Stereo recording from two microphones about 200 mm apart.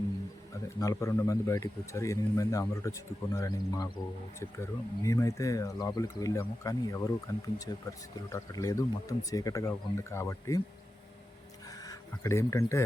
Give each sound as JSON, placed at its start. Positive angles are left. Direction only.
{"t": 0.8, "sound": "speech", "side_deg": 15}
{"t": 11.8, "sound": "speech", "side_deg": 15}